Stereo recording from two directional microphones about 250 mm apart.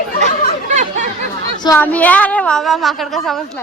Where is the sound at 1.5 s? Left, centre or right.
Centre.